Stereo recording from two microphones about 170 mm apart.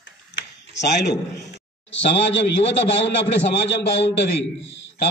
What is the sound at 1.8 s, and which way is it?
A man's voice, 90° left.